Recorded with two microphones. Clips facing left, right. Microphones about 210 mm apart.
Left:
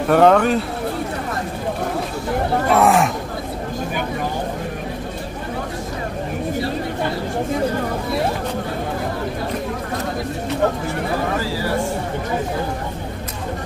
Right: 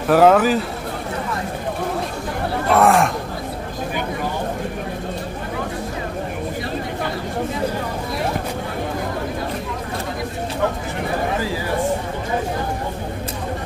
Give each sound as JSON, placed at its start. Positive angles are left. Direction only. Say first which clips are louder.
{"t": 0.1, "sound": "speech", "louder": "even", "side_deg": -5}
{"t": 2.7, "sound": "speech", "louder": "right 1 dB", "side_deg": 0}